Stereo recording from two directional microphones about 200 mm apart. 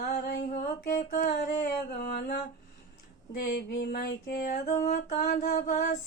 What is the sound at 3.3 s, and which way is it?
Female singing, 50° left (ahead or behind).